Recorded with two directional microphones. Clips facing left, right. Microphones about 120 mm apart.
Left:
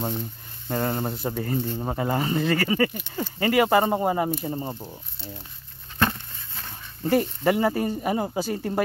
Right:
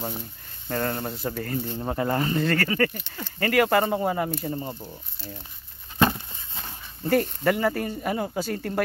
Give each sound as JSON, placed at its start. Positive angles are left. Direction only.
{"t": 0.7, "sound": "speech", "side_deg": 15}
{"t": 5.9, "sound": "a sound", "side_deg": -10}
{"t": 7.1, "sound": "speech", "side_deg": 15}